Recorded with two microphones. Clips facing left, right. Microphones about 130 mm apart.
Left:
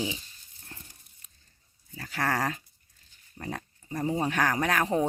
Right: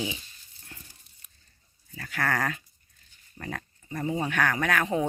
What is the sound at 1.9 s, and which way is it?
Speech, 30° left (ahead or behind).